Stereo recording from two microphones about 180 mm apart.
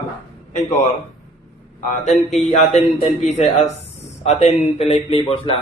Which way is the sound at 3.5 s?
35° left (ahead or behind).